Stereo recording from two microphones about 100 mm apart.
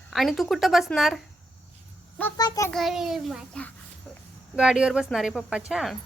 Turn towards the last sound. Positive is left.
turn(degrees=0)  # may be behind; listen again after turning